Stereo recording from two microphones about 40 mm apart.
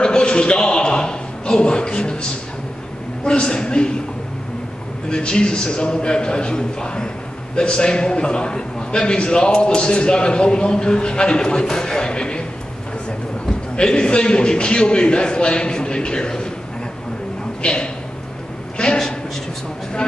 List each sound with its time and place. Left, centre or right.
0.0 s a sound: left
3.3 s a man's voice: left
5.1 s a man's voice: left
13.7 s a man's voice: left
17.6 s a man's voice: left